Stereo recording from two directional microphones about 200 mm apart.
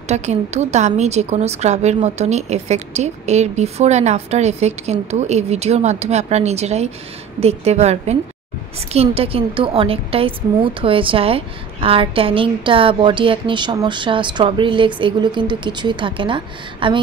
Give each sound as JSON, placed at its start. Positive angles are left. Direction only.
{"t": 0.1, "sound": "a woman's voice", "side_deg": -35}